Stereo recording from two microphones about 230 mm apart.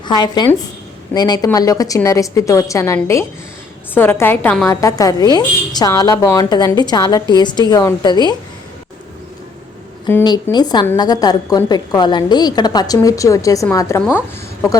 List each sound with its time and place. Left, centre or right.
0.0 s a woman's voice: centre
10.1 s a woman's voice: centre